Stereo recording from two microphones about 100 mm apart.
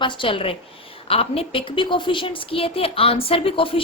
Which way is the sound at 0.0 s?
55° left (ahead or behind).